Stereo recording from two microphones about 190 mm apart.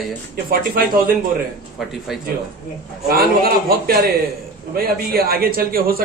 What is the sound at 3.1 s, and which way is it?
A man's voice, 50° right (ahead or behind).